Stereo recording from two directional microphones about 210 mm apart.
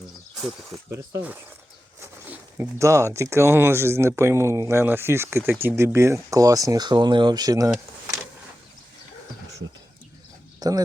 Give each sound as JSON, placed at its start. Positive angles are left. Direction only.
{"t": 0.9, "sound": "speech", "side_deg": -10}
{"t": 2.6, "sound": "speech", "side_deg": -15}
{"t": 10.6, "sound": "speech", "side_deg": -20}